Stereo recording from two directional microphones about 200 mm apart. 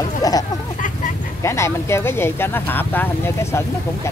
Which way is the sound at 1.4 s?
15° left (ahead or behind).